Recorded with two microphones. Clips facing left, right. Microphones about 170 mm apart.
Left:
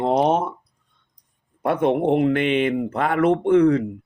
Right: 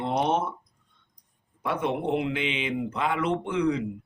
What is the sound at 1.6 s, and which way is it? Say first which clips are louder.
Speech: left 8 dB; 60° left (ahead or behind).